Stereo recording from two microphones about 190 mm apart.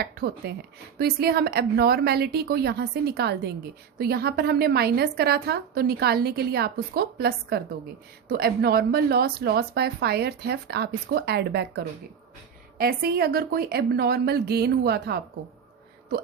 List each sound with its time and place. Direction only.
0.0 s a woman's voice: 55° right (ahead or behind)
12.8 s a woman's voice: 55° right (ahead or behind)